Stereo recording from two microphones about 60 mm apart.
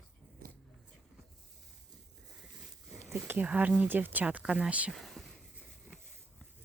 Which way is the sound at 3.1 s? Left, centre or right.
Right.